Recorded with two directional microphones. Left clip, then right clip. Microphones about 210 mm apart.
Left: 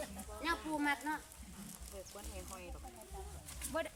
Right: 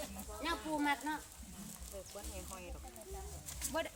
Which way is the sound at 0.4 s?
5° left (ahead or behind).